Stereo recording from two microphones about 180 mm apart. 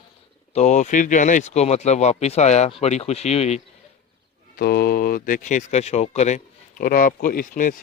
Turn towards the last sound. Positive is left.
turn(degrees=50)  # may be behind; listen again after turning